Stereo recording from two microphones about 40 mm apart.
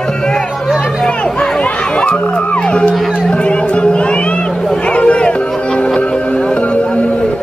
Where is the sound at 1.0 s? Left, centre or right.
Centre.